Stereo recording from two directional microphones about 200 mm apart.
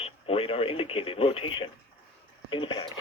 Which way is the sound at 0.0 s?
30° left (ahead or behind).